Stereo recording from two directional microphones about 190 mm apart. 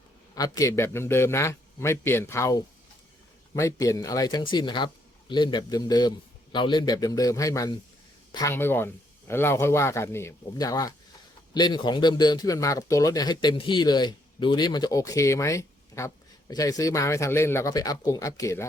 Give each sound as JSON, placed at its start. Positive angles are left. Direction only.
{"t": 0.3, "sound": "speech", "side_deg": 20}